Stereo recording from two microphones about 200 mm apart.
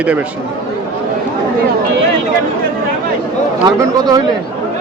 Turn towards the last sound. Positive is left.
turn(degrees=-20)  # may be behind; listen again after turning